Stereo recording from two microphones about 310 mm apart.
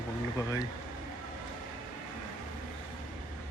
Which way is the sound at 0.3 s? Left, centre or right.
Centre.